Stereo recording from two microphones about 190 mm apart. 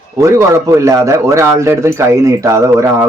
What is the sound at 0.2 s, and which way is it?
Speech, 15° right (ahead or behind).